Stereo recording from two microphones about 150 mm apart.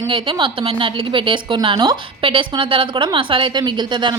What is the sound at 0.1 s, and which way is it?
A woman's voice, 30° right (ahead or behind).